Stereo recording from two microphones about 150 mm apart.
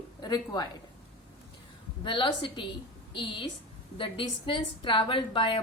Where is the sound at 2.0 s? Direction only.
35° left (ahead or behind).